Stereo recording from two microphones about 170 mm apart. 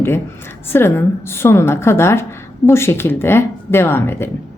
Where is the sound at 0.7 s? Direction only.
15° left (ahead or behind).